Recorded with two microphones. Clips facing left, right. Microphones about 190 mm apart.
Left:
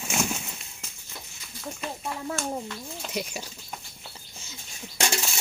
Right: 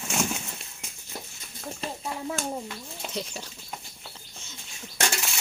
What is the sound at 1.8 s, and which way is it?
Speech, 30° right (ahead or behind).